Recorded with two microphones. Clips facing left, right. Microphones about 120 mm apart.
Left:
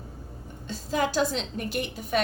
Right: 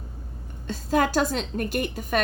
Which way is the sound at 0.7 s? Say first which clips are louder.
Right 4 dB; 50° right (ahead or behind).